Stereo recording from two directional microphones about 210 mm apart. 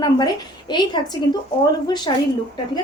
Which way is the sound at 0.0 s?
20° left (ahead or behind).